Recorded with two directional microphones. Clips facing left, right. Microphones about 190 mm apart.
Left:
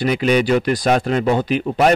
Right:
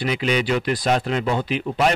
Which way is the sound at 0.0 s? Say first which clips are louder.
Left 5 dB; 45° left (ahead or behind).